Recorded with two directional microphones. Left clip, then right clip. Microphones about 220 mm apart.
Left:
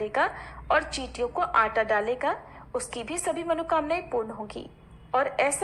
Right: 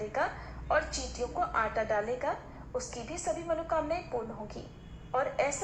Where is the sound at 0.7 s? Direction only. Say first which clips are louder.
Left 5 dB; 35° left (ahead or behind).